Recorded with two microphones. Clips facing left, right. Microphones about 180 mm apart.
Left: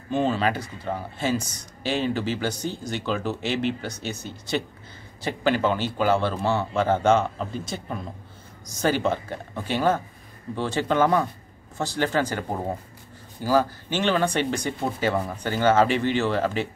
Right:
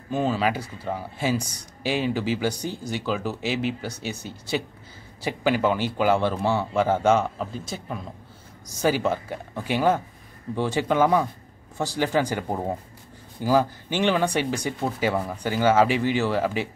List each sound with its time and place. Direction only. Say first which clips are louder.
0.1 s speech: left 1 dB; 5° right (ahead or behind)